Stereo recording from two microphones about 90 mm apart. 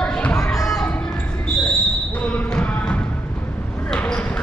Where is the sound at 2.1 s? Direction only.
15° left (ahead or behind).